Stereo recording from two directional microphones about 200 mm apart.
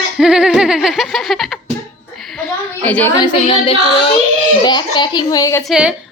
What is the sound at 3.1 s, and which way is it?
A child's voice, 25° left (ahead or behind).